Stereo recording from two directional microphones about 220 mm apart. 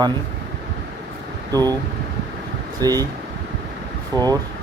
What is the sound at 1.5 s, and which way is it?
Speech, 15° right (ahead or behind).